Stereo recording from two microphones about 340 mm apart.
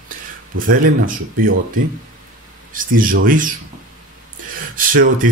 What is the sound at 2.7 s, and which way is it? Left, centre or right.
Speech, right.